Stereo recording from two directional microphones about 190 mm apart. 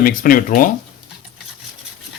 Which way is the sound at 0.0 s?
50° left (ahead or behind).